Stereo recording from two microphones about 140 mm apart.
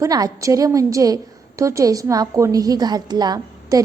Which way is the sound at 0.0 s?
25° right (ahead or behind).